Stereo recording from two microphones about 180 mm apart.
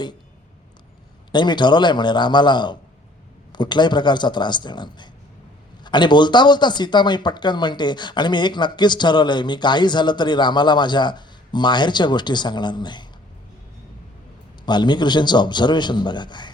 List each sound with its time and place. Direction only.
1.3 s speech: 25° left (ahead or behind)
14.6 s speech: 25° left (ahead or behind)